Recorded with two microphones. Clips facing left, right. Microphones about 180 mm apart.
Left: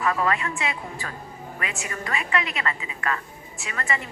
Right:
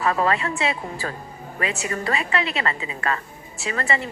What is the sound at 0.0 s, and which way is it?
A woman's voice, 35° right (ahead or behind).